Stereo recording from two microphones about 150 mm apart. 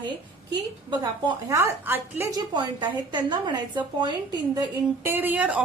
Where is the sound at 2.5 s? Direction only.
30° right (ahead or behind).